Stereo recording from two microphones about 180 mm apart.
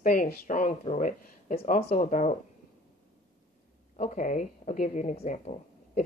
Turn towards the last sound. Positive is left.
turn(degrees=40)  # may be behind; listen again after turning